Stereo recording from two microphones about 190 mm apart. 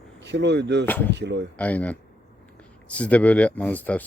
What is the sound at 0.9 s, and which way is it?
Speech, 10° left (ahead or behind).